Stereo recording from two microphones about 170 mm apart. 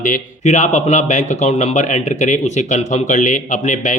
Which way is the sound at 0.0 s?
50° left (ahead or behind).